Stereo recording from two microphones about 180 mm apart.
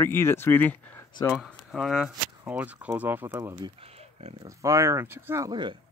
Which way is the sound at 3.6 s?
35° right (ahead or behind).